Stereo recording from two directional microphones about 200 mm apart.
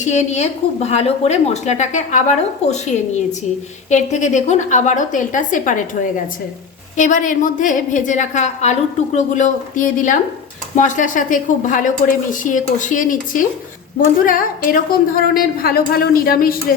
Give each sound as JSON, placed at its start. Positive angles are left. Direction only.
{"t": 0.0, "sound": "a woman's voice", "side_deg": 35}